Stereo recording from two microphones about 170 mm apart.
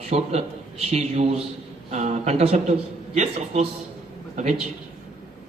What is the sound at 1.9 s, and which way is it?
A man's voice, 45° right (ahead or behind).